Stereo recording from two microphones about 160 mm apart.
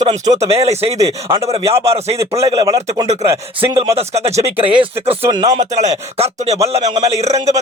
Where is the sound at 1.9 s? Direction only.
40° right (ahead or behind).